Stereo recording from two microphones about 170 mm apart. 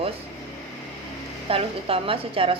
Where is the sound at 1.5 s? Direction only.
35° right (ahead or behind).